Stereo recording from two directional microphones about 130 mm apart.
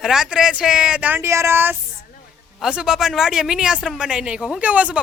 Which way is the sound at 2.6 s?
5° right (ahead or behind).